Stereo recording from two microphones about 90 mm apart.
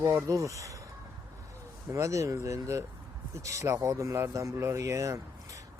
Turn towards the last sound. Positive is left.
turn(degrees=-35)  # may be behind; listen again after turning